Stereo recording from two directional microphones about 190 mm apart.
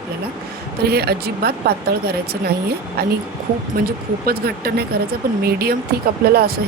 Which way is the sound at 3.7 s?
55° right (ahead or behind).